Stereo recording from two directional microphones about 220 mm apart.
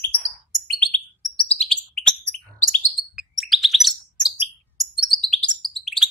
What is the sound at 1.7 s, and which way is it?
Bird, 5° left (ahead or behind).